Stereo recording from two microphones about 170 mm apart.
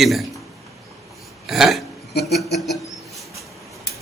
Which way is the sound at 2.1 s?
75° left (ahead or behind).